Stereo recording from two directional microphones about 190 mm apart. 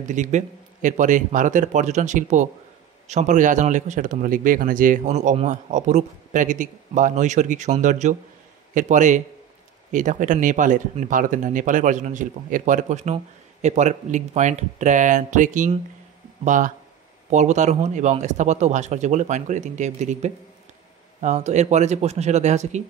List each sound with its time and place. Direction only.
0.1 s speech: 40° right (ahead or behind)